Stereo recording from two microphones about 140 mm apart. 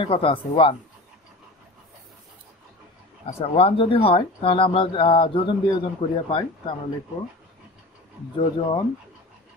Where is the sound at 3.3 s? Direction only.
45° left (ahead or behind).